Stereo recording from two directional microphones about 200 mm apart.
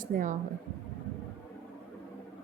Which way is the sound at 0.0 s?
40° right (ahead or behind).